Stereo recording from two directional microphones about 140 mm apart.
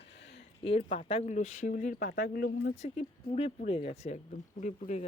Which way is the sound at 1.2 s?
60° left (ahead or behind).